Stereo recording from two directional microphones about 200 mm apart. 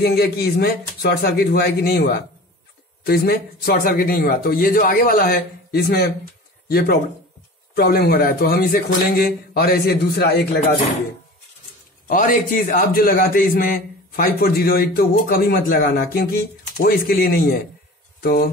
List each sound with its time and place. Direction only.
0.0 s a man's voice: 50° left (ahead or behind)
7.7 s a man's voice: 50° left (ahead or behind)
12.1 s a man's voice: 45° left (ahead or behind)